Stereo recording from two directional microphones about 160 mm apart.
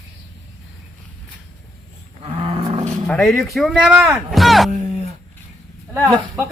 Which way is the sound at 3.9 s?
10° right (ahead or behind).